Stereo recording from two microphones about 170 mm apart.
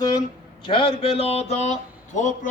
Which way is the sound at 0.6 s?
30° left (ahead or behind).